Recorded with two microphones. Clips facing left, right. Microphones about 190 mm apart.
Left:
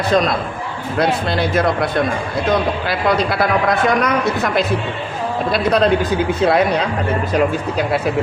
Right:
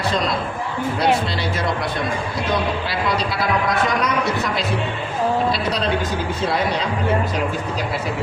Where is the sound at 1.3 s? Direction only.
55° left (ahead or behind).